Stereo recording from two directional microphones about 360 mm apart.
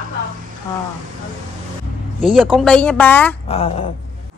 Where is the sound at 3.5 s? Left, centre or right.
Centre.